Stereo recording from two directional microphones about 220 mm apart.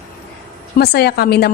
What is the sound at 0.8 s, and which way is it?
Speech, 45° left (ahead or behind).